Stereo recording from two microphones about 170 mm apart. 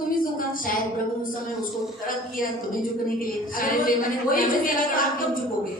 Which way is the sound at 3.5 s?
55° left (ahead or behind).